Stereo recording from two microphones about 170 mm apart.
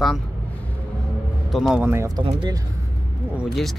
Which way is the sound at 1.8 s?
15° right (ahead or behind).